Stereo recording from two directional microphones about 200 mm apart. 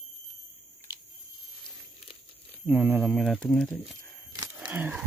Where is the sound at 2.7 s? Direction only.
5° right (ahead or behind).